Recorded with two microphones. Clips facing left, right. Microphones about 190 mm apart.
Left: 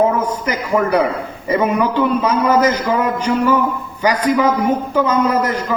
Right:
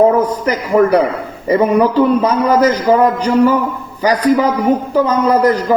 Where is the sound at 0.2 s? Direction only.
35° right (ahead or behind).